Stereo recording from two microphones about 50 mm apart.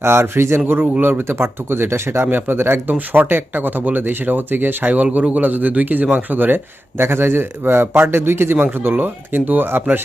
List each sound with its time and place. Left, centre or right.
0.0 s a man's voice: right
8.5 s speech: right